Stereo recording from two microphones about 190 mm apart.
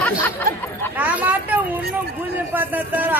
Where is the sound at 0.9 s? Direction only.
10° right (ahead or behind).